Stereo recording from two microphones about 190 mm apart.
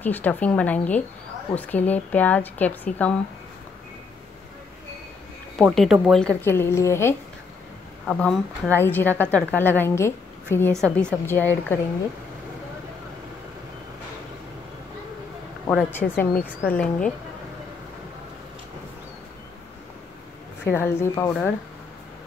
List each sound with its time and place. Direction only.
0.0 s a woman's voice: 10° left (ahead or behind)
5.6 s a woman's voice: centre (ahead or behind)
15.7 s a woman's voice: 10° left (ahead or behind)
20.7 s a woman's voice: 15° left (ahead or behind)